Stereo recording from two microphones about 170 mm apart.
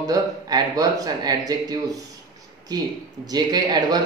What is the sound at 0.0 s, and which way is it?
Speech, 20° right (ahead or behind).